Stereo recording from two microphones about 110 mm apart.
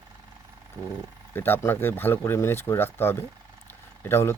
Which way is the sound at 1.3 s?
20° left (ahead or behind).